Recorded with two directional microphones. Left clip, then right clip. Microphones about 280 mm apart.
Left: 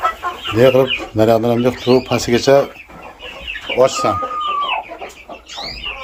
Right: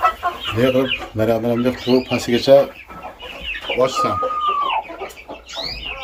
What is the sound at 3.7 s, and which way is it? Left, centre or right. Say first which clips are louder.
Speech: left 4 dB; centre.